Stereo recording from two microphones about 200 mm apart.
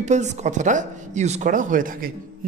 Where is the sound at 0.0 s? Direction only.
35° right (ahead or behind).